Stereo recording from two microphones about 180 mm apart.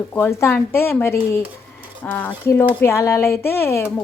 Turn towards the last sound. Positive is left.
turn(degrees=15)  # may be behind; listen again after turning